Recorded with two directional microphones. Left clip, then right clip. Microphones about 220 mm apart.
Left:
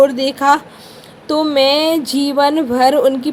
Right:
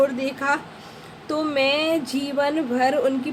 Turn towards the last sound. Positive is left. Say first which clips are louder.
# left 8 dB
turn(degrees=30)  # may be behind; listen again after turning